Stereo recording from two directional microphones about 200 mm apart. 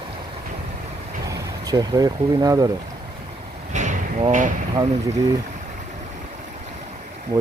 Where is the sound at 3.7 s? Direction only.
35° right (ahead or behind).